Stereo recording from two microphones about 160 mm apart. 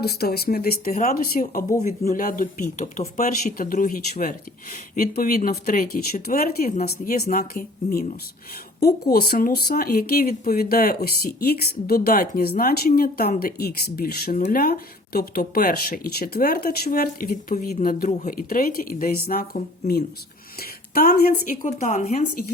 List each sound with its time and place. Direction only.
0.0 s speech: 80° left; by 1.6 s 65° left (ahead or behind)
1.8 s speech: 50° left (ahead or behind); by 17.3 s 65° left (ahead or behind)
17.7 s speech: 55° left (ahead or behind)
20.6 s a sound: 70° left (ahead or behind)
21.2 s speech: 65° left (ahead or behind)
22.0 s speech: 65° left (ahead or behind)